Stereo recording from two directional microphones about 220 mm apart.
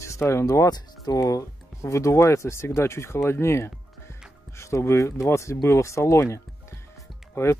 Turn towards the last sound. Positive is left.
turn(degrees=10)  # may be behind; listen again after turning